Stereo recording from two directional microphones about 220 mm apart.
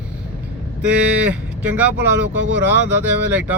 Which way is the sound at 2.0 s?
55° right (ahead or behind).